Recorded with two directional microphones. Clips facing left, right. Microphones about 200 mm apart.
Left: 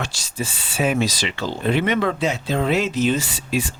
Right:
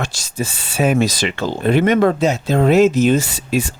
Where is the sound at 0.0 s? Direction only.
50° right (ahead or behind).